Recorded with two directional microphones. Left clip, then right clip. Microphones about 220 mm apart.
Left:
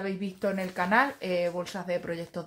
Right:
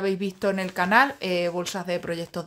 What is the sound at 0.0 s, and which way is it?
Speech, 35° right (ahead or behind).